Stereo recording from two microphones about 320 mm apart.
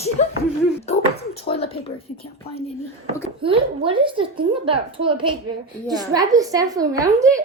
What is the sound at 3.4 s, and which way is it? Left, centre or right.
A woman's voice, centre.